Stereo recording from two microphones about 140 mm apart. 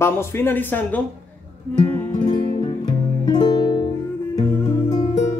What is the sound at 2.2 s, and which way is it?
Music, 35° left (ahead or behind).